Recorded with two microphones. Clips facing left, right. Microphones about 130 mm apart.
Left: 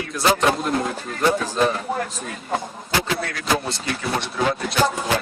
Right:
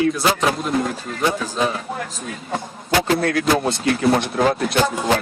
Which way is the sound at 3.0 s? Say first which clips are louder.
Right 6 dB; 50° right (ahead or behind).